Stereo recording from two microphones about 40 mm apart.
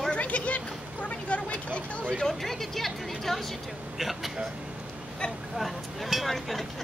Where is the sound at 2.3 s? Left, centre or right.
Centre.